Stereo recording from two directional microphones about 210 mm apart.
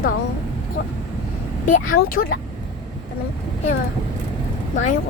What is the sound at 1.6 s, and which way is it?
Speech, 40° left (ahead or behind).